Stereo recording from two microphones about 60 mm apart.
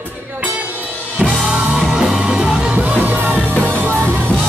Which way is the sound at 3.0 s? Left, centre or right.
Right.